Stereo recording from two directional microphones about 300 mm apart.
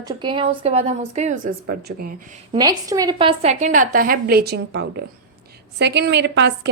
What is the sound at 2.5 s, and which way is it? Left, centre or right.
A woman's voice, centre.